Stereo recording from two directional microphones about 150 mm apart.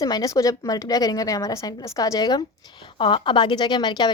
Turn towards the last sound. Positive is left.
turn(degrees=30)  # may be behind; listen again after turning